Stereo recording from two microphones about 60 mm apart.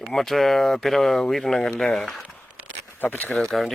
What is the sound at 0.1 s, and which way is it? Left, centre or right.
Speech, centre.